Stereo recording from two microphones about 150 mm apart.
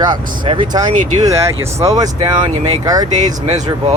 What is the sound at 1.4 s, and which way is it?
Speech, 20° right (ahead or behind).